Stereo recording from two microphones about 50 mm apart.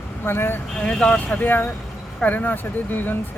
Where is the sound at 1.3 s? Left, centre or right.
Left.